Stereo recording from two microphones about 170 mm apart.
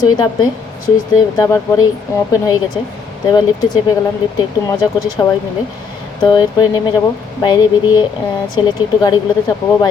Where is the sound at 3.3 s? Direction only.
25° left (ahead or behind).